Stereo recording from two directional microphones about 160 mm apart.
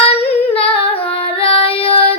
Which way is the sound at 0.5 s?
35° left (ahead or behind).